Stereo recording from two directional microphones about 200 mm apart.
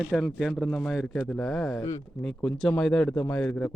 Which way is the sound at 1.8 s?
15° left (ahead or behind).